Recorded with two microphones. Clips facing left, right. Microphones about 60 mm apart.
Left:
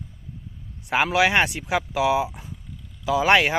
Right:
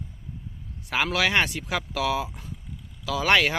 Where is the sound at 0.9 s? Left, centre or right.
Centre.